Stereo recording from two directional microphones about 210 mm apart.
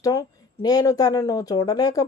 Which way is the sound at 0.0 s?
15° left (ahead or behind).